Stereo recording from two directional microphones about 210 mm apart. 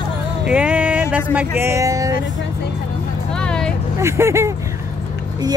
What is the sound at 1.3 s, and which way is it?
Speech, 10° right (ahead or behind).